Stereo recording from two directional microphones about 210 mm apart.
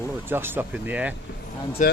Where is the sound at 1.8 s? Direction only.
40° left (ahead or behind).